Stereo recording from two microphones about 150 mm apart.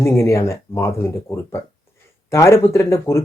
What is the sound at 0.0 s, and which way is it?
Speech, 20° left (ahead or behind).